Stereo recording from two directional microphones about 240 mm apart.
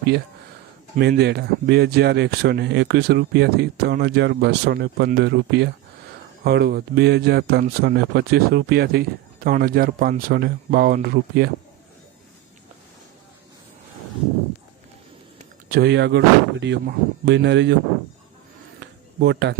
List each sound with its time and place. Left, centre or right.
0.9 s speech: right
15.7 s speech: right
18.8 s a sound: right